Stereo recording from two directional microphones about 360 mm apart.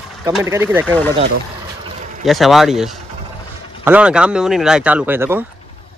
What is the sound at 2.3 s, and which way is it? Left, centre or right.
Speech, centre.